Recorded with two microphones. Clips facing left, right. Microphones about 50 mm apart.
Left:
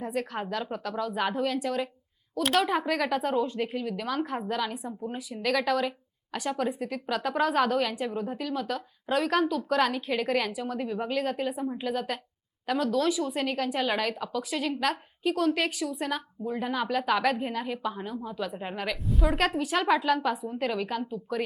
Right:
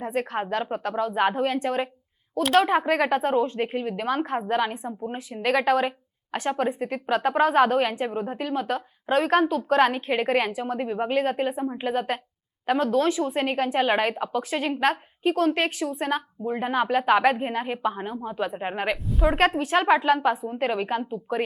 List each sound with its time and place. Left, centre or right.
0.0 s speech: right
19.0 s a woman's voice: centre
19.4 s a woman's voice: right